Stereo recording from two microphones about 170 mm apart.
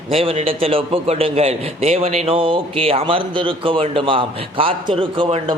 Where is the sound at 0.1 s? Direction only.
35° right (ahead or behind).